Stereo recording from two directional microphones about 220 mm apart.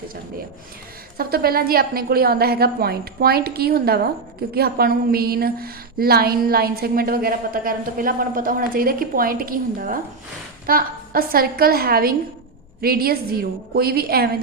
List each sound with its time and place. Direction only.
1.1 s a woman's voice: 45° right (ahead or behind)